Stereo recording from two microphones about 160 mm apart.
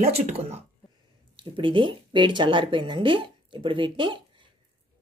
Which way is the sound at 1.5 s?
30° right (ahead or behind).